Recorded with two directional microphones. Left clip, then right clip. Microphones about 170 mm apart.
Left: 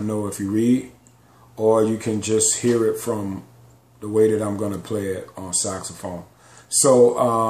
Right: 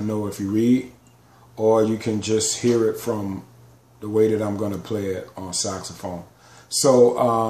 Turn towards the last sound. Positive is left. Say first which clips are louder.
# left 1 dB
turn(degrees=0)  # may be behind; listen again after turning